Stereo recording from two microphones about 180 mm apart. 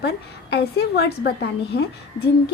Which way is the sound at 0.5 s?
65° left (ahead or behind).